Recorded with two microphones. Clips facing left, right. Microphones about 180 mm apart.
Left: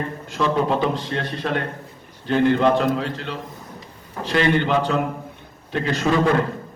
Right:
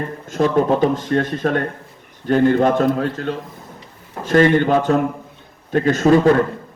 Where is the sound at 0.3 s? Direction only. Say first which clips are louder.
Right 5 dB; 45° right (ahead or behind).